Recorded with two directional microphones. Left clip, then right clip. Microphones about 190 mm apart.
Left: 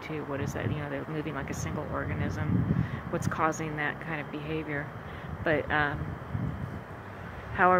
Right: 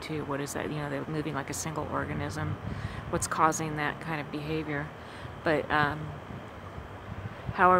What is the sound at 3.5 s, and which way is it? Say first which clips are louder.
Speech: even; 25° right (ahead or behind).